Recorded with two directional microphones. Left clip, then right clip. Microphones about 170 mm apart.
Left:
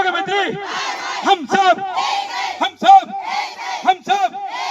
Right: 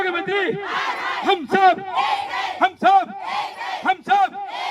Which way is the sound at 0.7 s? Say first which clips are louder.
Even; centre (ahead or behind).